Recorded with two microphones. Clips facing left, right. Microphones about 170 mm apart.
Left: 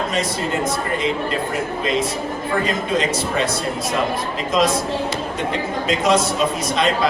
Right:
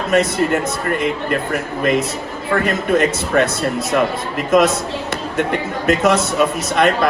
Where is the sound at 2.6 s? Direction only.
55° right (ahead or behind).